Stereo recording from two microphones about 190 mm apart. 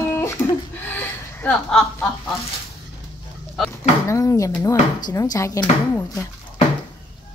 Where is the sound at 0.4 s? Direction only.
15° left (ahead or behind).